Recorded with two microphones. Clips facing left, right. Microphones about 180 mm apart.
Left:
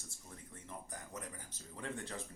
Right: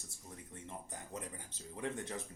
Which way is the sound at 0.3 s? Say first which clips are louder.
Right 3 dB; 20° right (ahead or behind).